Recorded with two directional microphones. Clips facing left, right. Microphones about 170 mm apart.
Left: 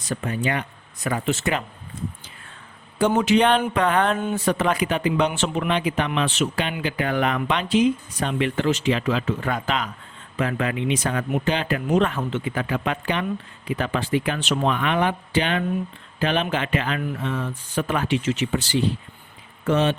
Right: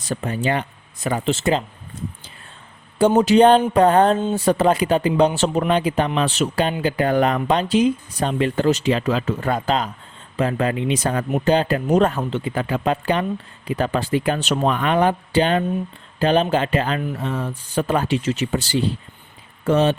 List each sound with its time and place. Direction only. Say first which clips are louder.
0.1 s speech: right 3 dB; 30° right (ahead or behind)
3.2 s speech: right 6 dB; 35° right (ahead or behind)